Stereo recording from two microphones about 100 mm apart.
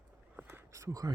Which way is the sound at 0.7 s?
30° right (ahead or behind).